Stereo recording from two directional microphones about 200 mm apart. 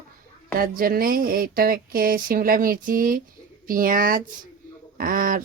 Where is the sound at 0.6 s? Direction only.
45° right (ahead or behind).